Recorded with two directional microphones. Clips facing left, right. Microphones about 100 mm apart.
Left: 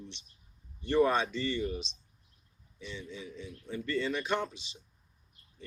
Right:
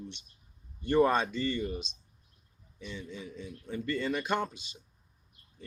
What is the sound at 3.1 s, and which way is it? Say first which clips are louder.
A man's voice: right 1 dB; 50° right (ahead or behind).